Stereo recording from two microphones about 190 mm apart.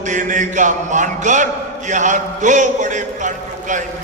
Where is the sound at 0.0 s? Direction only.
40° right (ahead or behind).